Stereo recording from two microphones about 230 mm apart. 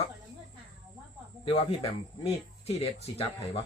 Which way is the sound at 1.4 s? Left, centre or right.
Left.